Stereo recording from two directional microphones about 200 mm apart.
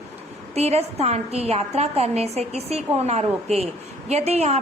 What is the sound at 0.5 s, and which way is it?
A woman's voice, 30° right (ahead or behind).